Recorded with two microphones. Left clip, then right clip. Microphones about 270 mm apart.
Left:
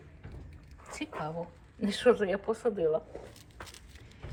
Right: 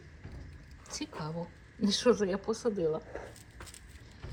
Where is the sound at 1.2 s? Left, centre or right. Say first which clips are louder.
Left 6 dB; centre.